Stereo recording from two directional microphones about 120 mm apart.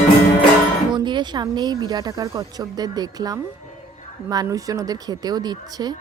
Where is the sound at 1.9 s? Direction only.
35° right (ahead or behind).